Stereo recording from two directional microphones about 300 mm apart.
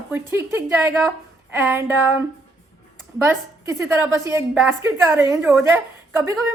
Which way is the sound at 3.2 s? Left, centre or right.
Centre.